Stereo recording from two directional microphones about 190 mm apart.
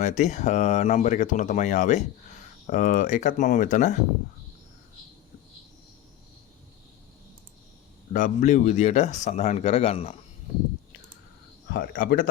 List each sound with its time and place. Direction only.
0.0 s speech: 40° left (ahead or behind)
8.1 s speech: 45° left (ahead or behind)
11.7 s speech: 50° left (ahead or behind)